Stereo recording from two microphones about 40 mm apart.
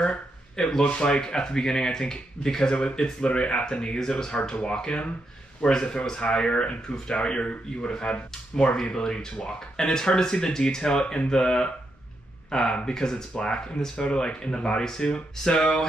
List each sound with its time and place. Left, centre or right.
0.6 s speech: centre